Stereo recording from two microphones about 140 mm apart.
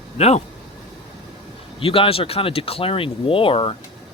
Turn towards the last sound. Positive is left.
turn(degrees=40)  # may be behind; listen again after turning